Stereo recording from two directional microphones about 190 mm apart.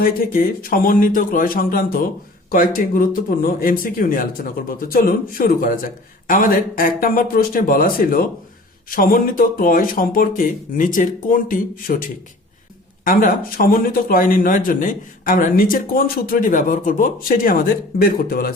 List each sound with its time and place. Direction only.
0.0 s speech: 50° left (ahead or behind)
13.1 s speech: 50° left (ahead or behind)